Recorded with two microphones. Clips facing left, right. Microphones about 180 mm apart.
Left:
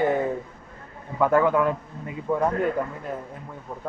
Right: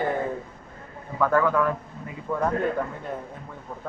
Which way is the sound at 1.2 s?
20° left (ahead or behind).